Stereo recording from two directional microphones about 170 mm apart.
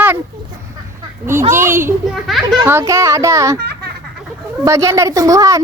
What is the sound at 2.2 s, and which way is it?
Children playing, centre (ahead or behind).